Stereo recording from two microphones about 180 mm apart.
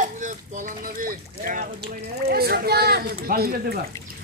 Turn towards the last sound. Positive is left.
turn(degrees=-60)  # may be behind; listen again after turning